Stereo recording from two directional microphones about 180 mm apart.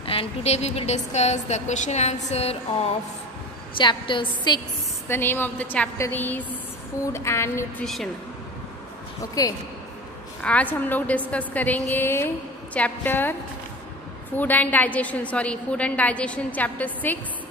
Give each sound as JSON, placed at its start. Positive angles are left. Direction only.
{"t": 0.0, "sound": "a woman's voice", "side_deg": 30}
{"t": 5.0, "sound": "a woman's voice", "side_deg": 10}
{"t": 7.8, "sound": "speech", "side_deg": 0}
{"t": 9.4, "sound": "a woman's voice", "side_deg": 20}
{"t": 10.4, "sound": "a woman's voice", "side_deg": 10}